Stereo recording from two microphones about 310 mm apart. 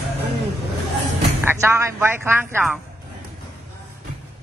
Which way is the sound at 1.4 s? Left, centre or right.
Centre.